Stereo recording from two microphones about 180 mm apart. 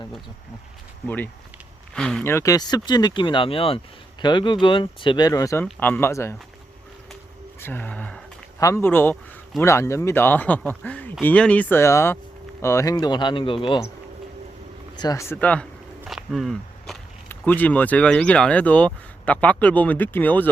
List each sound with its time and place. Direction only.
1.0 s speech: 10° left (ahead or behind)
2.3 s speech: 20° left (ahead or behind)
7.6 s a sound: 10° left (ahead or behind)
8.6 s speech: 15° left (ahead or behind); by 13.8 s 30° left (ahead or behind)
15.0 s speech: 15° left (ahead or behind)